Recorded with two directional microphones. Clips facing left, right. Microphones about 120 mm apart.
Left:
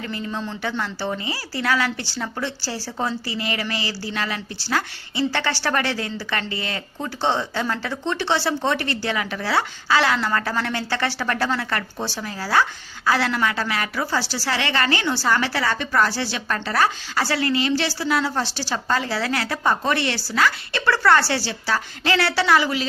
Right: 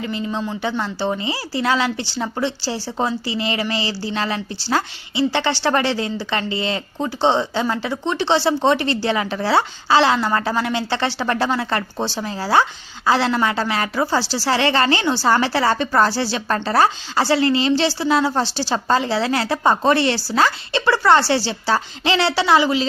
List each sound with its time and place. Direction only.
0.0 s speech: 20° right (ahead or behind)